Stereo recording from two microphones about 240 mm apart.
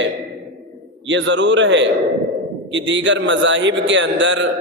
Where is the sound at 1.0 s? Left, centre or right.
Right.